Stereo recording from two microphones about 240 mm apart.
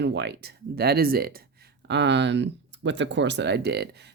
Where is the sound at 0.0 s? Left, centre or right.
Right.